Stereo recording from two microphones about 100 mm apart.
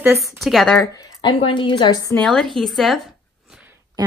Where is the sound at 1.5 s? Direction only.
55° left (ahead or behind).